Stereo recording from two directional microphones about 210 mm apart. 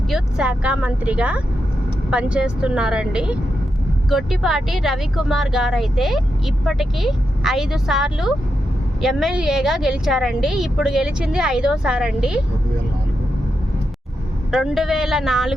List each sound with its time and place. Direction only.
0.1 s a woman's voice: 5° right (ahead or behind)
14.5 s a woman's voice: centre (ahead or behind)